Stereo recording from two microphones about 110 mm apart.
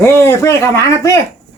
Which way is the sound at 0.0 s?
25° left (ahead or behind).